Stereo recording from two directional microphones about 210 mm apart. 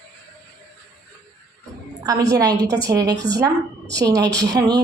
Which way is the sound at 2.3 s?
20° right (ahead or behind).